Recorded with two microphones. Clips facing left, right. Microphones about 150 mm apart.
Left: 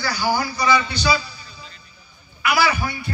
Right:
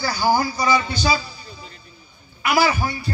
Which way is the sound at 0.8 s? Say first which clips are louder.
Even; 45° right (ahead or behind).